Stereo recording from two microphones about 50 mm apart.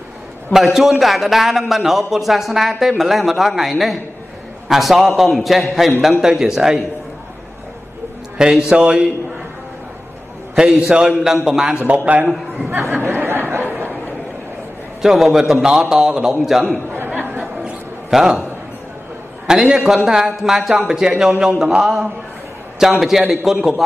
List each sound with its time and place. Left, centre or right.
0.5 s a man's voice: centre
8.4 s a man's voice: centre
10.5 s a man's voice: centre
12.9 s speech: right
15.0 s a man's voice: centre
17.1 s chatter: right
18.1 s a man's voice: centre
19.4 s a man's voice: centre